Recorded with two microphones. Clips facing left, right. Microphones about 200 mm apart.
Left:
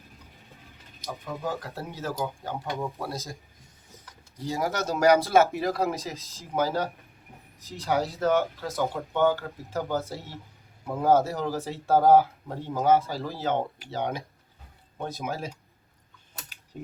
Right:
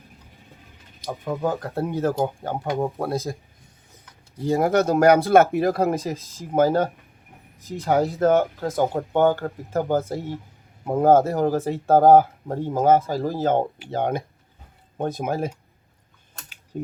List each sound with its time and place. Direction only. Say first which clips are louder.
1.0 s speech: right 8 dB; 50° right (ahead or behind)
4.4 s speech: right 9 dB; 55° right (ahead or behind)